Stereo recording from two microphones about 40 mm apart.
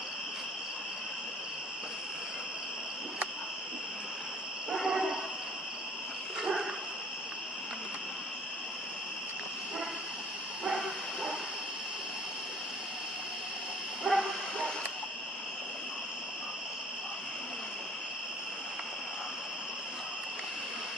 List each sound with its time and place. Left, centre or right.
4.7 s a sound: centre
6.4 s dog: centre
14.1 s bow-wow: right